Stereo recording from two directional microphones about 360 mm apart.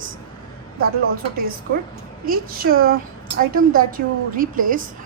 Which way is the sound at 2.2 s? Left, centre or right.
Right.